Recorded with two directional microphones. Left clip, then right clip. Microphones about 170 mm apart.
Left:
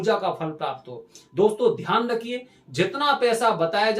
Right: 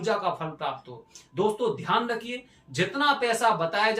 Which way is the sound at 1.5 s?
20° left (ahead or behind).